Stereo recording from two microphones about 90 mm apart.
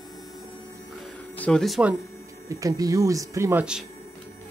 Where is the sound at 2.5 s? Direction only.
40° right (ahead or behind).